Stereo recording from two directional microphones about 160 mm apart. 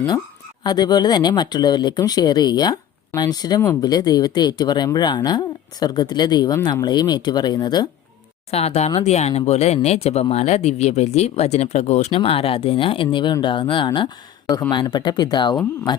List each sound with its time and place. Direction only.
0.6 s speech: 25° left (ahead or behind)
8.4 s speech: 40° left (ahead or behind)